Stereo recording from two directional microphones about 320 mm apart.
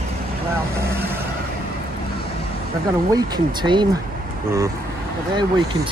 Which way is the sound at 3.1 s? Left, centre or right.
Centre.